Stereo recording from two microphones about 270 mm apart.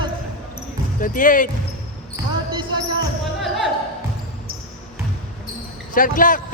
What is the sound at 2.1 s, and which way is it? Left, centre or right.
Basketball bounce, centre.